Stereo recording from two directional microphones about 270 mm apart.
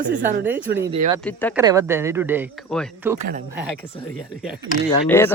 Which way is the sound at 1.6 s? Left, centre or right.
Centre.